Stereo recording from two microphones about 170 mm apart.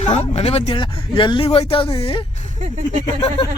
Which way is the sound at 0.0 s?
40° left (ahead or behind).